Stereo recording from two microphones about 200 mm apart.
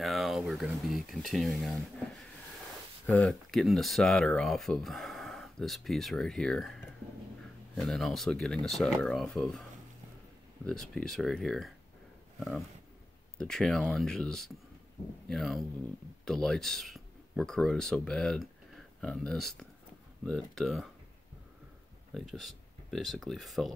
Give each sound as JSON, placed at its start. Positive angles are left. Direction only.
{"t": 0.0, "sound": "speech", "side_deg": 0}
{"t": 3.1, "sound": "speech", "side_deg": 5}
{"t": 10.6, "sound": "speech", "side_deg": 5}
{"t": 22.1, "sound": "speech", "side_deg": 0}